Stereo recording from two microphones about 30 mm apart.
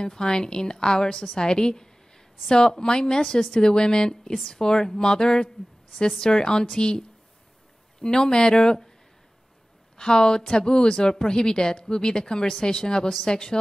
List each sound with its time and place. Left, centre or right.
0.0 s a woman's voice: left
9.9 s a woman's voice: left